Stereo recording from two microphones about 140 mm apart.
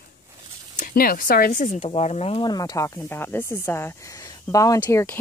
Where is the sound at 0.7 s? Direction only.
80° left.